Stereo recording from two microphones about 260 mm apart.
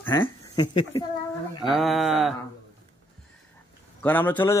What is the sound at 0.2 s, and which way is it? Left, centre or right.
Speech, centre.